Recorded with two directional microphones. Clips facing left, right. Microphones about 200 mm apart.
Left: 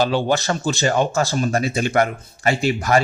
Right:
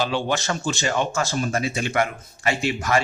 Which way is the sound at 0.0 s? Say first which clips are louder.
Left 5 dB; 40° left (ahead or behind).